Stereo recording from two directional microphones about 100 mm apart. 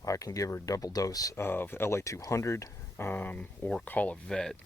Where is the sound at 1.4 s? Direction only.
20° left (ahead or behind).